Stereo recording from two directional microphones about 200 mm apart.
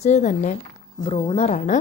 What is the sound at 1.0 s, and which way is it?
Speech, 25° left (ahead or behind).